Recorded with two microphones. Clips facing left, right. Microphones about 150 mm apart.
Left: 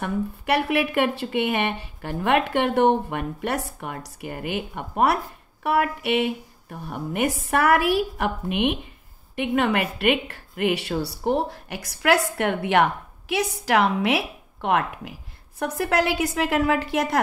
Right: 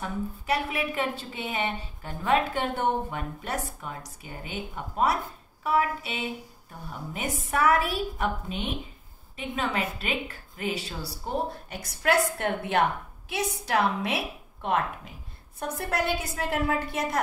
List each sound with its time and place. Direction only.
0.0 s speech: 75° left (ahead or behind)
15.6 s a woman's voice: 85° left